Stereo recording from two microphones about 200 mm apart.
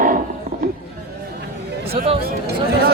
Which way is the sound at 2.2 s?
50° right (ahead or behind).